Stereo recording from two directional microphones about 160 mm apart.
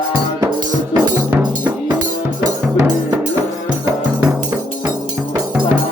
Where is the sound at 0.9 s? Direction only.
25° right (ahead or behind).